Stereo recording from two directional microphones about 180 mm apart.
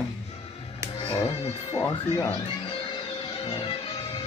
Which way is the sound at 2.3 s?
30° left (ahead or behind).